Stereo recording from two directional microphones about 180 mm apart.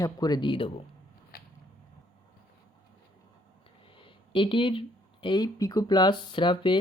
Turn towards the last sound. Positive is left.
turn(degrees=25)  # may be behind; listen again after turning